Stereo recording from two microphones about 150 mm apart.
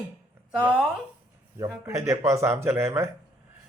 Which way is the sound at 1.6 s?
20° right (ahead or behind).